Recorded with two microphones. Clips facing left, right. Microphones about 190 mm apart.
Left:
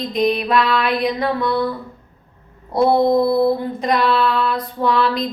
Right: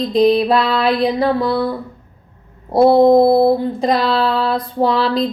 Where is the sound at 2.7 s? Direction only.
30° right (ahead or behind).